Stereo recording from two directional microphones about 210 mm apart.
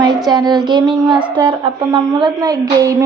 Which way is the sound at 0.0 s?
20° right (ahead or behind).